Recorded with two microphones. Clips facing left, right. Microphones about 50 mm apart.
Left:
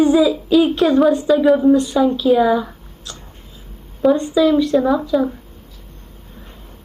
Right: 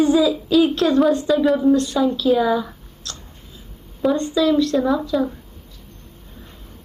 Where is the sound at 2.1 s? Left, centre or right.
Centre.